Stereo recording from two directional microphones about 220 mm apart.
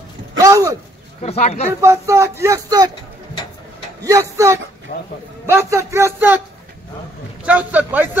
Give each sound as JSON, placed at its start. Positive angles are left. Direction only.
{"t": 0.4, "sound": "a sound", "side_deg": -15}
{"t": 1.2, "sound": "speech", "side_deg": 30}
{"t": 1.7, "sound": "speech", "side_deg": -10}
{"t": 4.0, "sound": "speech", "side_deg": -15}
{"t": 4.9, "sound": "speech", "side_deg": 35}
{"t": 5.5, "sound": "speech", "side_deg": -10}
{"t": 7.4, "sound": "speech", "side_deg": -5}